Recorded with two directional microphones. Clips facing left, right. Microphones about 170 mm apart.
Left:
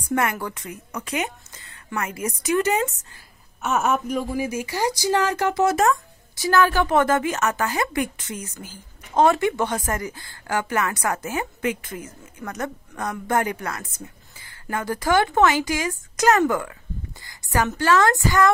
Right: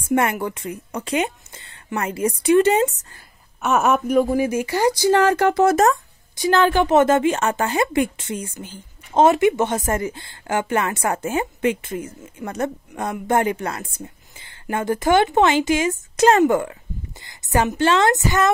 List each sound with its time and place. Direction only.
0.1 s a woman's voice: 25° right (ahead or behind)
3.6 s a woman's voice: 60° right (ahead or behind)
6.3 s a woman's voice: 20° right (ahead or behind)